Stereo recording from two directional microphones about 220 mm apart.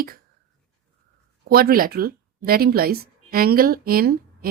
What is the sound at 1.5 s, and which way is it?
Speech, 45° right (ahead or behind).